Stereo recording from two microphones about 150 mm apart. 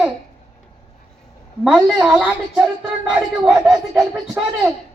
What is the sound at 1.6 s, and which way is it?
A woman's voice, centre (ahead or behind).